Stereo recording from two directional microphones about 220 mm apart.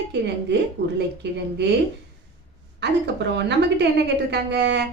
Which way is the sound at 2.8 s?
50° right (ahead or behind).